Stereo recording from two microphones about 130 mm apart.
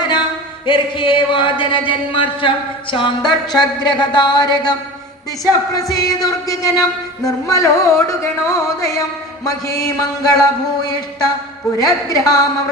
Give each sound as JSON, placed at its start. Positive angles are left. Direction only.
{"t": 0.6, "sound": "a sound", "side_deg": 40}
{"t": 5.5, "sound": "music", "side_deg": 25}
{"t": 11.8, "sound": "music", "side_deg": 25}